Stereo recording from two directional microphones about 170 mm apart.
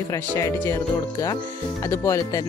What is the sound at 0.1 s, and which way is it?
Speech, 15° left (ahead or behind).